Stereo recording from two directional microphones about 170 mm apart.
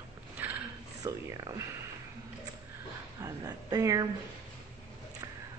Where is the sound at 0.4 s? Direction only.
10° right (ahead or behind).